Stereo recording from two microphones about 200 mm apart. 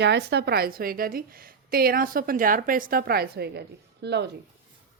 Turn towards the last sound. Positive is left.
turn(degrees=-55)  # may be behind; listen again after turning